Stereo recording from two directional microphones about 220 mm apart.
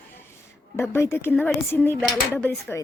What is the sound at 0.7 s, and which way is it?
A woman's voice, 10° left (ahead or behind).